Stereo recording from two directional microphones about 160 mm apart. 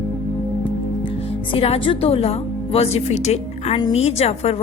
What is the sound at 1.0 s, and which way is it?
A woman's voice, 35° left (ahead or behind).